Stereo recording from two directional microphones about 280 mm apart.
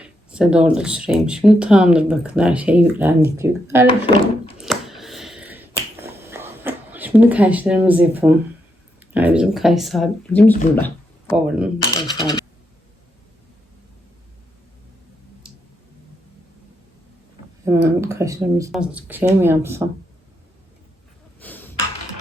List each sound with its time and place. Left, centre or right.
0.0 s speech: centre
3.8 s speech: centre
4.5 s finger snapping: centre
9.1 s speech: centre
17.7 s speech: centre
21.4 s a sound: centre